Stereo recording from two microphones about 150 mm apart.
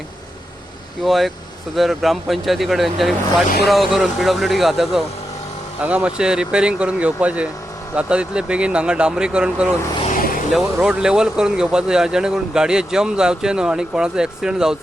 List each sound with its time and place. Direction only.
1.0 s speech: centre (ahead or behind)
10.1 s vehicle: 65° left (ahead or behind)
10.5 s speech: 5° right (ahead or behind)